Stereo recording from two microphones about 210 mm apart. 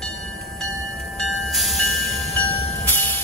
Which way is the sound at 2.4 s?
30° left (ahead or behind).